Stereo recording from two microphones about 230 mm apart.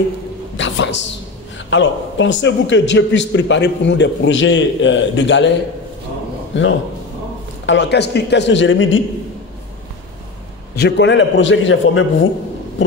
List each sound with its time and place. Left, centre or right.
0.6 s a woman's voice: left
10.8 s a man's voice: left